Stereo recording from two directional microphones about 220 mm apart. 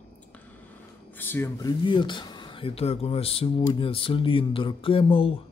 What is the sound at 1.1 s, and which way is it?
Speech, 10° left (ahead or behind).